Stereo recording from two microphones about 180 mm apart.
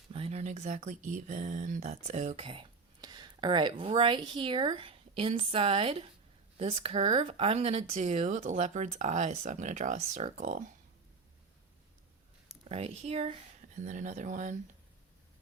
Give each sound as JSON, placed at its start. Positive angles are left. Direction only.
{"t": 0.1, "sound": "speech", "side_deg": -35}
{"t": 12.6, "sound": "speech", "side_deg": -35}